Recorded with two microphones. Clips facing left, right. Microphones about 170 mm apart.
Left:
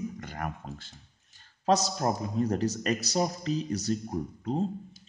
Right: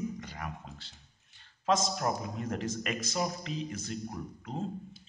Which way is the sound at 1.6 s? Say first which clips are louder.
Left 3 dB; 35° left (ahead or behind).